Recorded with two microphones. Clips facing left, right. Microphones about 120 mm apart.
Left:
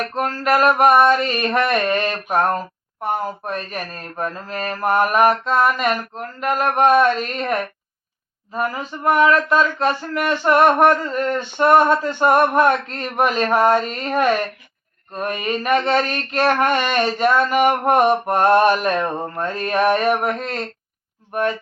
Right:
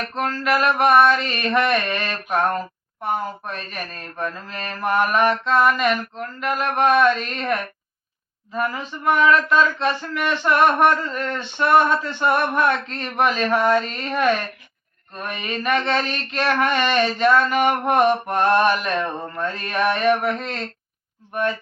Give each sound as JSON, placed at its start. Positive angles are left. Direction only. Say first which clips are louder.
{"t": 0.2, "sound": "speech", "louder": "left 3 dB", "side_deg": 45}
{"t": 1.1, "sound": "mantra", "louder": "left 3 dB", "side_deg": 40}
{"t": 1.7, "sound": "speech", "louder": "left 4 dB", "side_deg": 45}
{"t": 3.4, "sound": "mantra", "louder": "left 4 dB", "side_deg": 45}
{"t": 8.5, "sound": "speech", "louder": "left 1 dB", "side_deg": 40}
{"t": 14.0, "sound": "mantra", "louder": "left 2 dB", "side_deg": 40}
{"t": 15.1, "sound": "speech", "louder": "left 6 dB", "side_deg": 45}
{"t": 16.9, "sound": "mantra", "louder": "left 1 dB", "side_deg": 40}
{"t": 17.3, "sound": "a man's voice", "louder": "left 2 dB", "side_deg": 10}
{"t": 17.7, "sound": "speech", "louder": "left 2 dB", "side_deg": 45}
{"t": 19.4, "sound": "mantra", "louder": "left 4 dB", "side_deg": 40}